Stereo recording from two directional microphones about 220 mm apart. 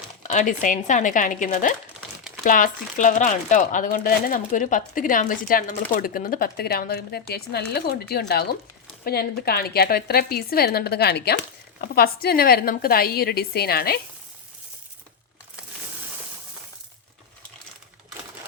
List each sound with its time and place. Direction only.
0.2 s speech: 35° left (ahead or behind)